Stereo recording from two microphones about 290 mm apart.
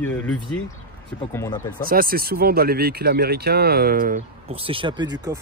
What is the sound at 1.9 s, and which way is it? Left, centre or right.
Speech, right.